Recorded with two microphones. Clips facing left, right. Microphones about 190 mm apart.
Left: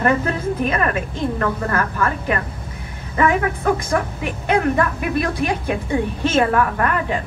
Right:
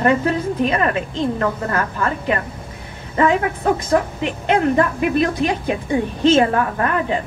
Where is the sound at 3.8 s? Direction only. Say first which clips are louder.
Right 3 dB; 20° right (ahead or behind).